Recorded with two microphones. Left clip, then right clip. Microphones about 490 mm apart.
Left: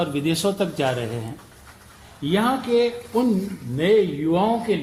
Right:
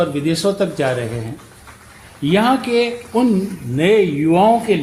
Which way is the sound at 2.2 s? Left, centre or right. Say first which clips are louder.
Right 6 dB; centre.